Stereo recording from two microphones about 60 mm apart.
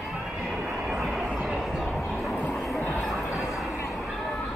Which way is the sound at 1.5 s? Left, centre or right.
Centre.